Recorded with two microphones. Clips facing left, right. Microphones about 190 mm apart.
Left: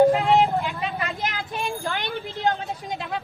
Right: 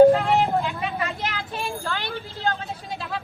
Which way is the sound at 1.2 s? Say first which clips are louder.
Left 1 dB; 15° left (ahead or behind).